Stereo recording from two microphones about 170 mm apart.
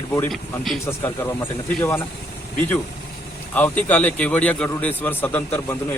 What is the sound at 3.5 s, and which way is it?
A man's voice, 10° left (ahead or behind).